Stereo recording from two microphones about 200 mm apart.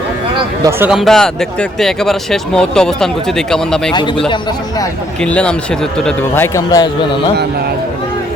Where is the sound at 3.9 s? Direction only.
20° left (ahead or behind).